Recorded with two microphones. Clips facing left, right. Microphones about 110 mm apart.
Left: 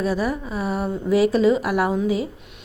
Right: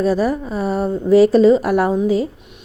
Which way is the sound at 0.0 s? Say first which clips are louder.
Right 6 dB; 35° right (ahead or behind).